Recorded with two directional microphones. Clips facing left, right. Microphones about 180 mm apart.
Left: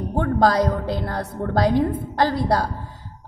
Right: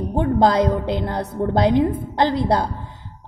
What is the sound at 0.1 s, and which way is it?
A woman's voice, 20° right (ahead or behind).